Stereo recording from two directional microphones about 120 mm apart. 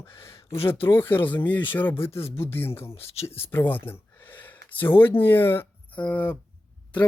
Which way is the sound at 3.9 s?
15° left (ahead or behind).